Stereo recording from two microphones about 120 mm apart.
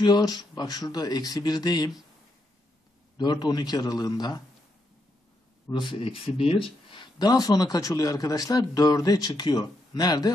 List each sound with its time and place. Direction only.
0.0 s speech: 35° left (ahead or behind)
3.2 s speech: 35° left (ahead or behind)
5.7 s speech: 40° left (ahead or behind)